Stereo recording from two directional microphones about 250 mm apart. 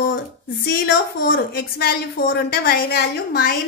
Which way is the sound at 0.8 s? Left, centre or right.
Left.